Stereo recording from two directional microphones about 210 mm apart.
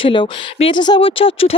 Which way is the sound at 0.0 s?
25° left (ahead or behind).